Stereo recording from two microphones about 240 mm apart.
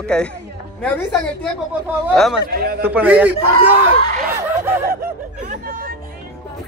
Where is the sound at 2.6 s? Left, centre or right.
Right.